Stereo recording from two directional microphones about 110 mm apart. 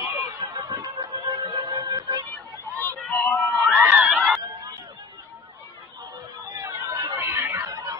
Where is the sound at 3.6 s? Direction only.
10° right (ahead or behind).